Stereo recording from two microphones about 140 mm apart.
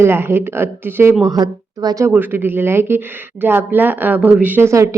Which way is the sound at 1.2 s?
30° right (ahead or behind).